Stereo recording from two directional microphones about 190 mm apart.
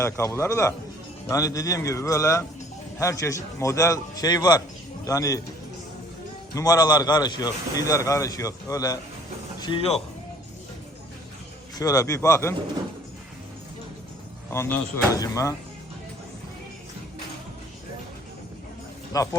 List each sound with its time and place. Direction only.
0.0 s a man's voice: 15° left (ahead or behind)
6.5 s a man's voice: 20° left (ahead or behind)
9.6 s music: 20° left (ahead or behind)
11.8 s a man's voice: 15° left (ahead or behind)
14.5 s a man's voice: 15° left (ahead or behind)
19.1 s a man's voice: 15° left (ahead or behind)